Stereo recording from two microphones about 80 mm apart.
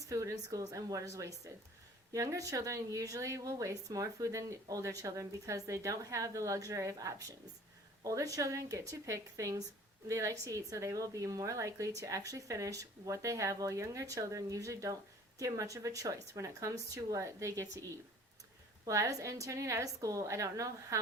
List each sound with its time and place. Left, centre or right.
0.1 s a woman's voice: right
18.9 s a woman's voice: right